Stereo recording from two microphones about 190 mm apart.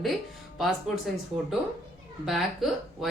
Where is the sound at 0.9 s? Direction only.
Centre (ahead or behind).